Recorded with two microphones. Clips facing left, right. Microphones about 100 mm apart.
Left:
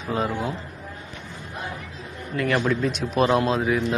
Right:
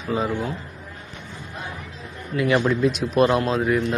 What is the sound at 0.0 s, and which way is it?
Speech, centre (ahead or behind).